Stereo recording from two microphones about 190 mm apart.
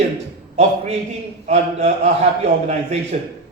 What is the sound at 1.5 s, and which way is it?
A man's voice, 35° right (ahead or behind).